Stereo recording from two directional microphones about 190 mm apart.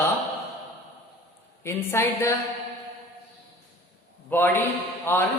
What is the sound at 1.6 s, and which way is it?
Speech, 15° left (ahead or behind).